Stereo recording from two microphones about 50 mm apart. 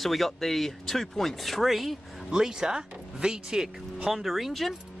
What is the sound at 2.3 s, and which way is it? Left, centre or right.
Speech, centre.